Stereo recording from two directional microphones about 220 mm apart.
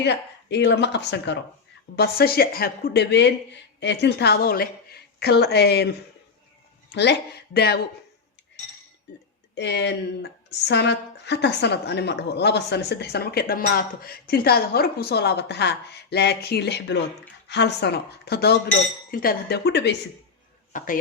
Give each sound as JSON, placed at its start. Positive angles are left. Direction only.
{"t": 0.0, "sound": "a woman's voice", "side_deg": 50}
{"t": 6.9, "sound": "a woman's voice", "side_deg": 50}
{"t": 9.6, "sound": "a woman's voice", "side_deg": 50}
{"t": 20.7, "sound": "speech", "side_deg": 40}